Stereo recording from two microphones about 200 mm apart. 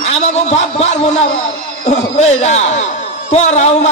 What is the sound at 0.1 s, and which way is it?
A man's voice, 35° left (ahead or behind).